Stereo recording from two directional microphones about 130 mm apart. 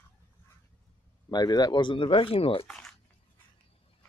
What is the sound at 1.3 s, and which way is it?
Speech, 30° left (ahead or behind).